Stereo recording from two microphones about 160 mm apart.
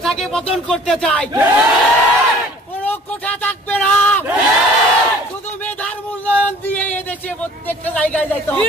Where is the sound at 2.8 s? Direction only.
10° left (ahead or behind).